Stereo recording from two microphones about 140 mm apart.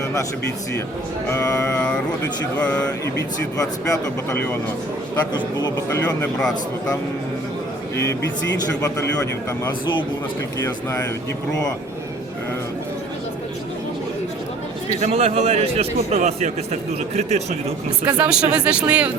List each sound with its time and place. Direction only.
1.3 s music: 20° left (ahead or behind)
2.6 s speech: 10° left (ahead or behind)
3.6 s speech: 25° left (ahead or behind)
10.6 s speech: 25° left (ahead or behind)
15.0 s a man's voice: 45° right (ahead or behind)
18.0 s speech: 10° right (ahead or behind)